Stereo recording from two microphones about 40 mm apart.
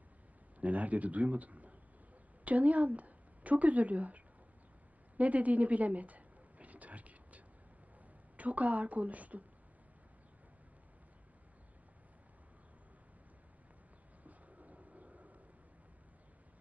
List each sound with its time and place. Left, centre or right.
0.6 s a woman's voice: right
5.1 s a sound: right
8.4 s speech: right
14.3 s vehicle: right